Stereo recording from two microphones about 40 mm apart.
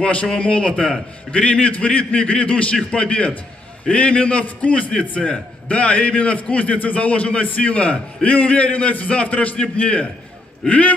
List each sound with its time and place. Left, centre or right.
0.0 s a man's voice: left